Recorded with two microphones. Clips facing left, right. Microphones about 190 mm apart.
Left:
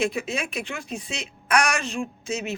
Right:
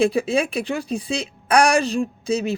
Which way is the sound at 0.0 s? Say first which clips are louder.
Right 8 dB; 35° right (ahead or behind).